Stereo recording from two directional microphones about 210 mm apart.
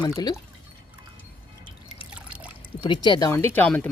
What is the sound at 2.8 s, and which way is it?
A woman's voice, 20° left (ahead or behind).